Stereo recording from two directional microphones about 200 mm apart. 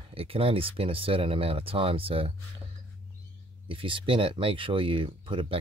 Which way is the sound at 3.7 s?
25° right (ahead or behind).